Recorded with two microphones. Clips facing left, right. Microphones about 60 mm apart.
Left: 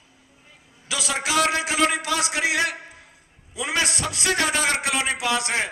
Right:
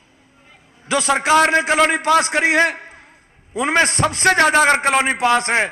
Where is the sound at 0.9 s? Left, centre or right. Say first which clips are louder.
Right 9 dB; right.